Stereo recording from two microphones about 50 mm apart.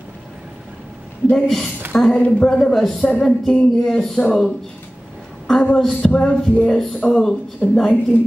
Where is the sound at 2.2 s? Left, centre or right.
Left.